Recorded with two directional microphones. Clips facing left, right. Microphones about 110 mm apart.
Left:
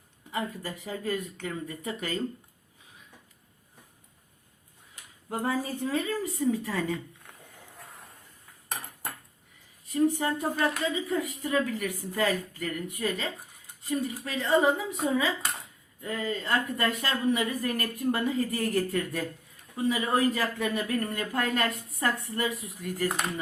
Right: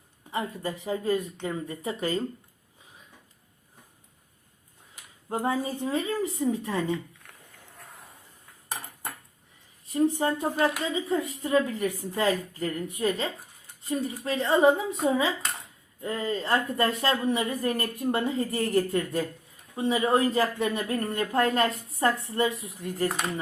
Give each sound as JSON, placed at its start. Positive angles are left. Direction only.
{"t": 0.3, "sound": "a woman's voice", "side_deg": -20}
{"t": 5.3, "sound": "a woman's voice", "side_deg": -20}
{"t": 7.8, "sound": "a sound", "side_deg": 0}
{"t": 8.7, "sound": "cutlery", "side_deg": 0}
{"t": 9.9, "sound": "a woman's voice", "side_deg": -25}
{"t": 15.4, "sound": "dishes", "side_deg": 5}
{"t": 16.0, "sound": "a woman's voice", "side_deg": -30}
{"t": 23.0, "sound": "speech", "side_deg": 0}